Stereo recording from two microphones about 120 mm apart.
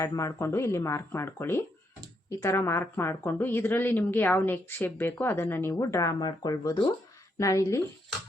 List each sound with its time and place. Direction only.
0.0 s speech: 30° left (ahead or behind)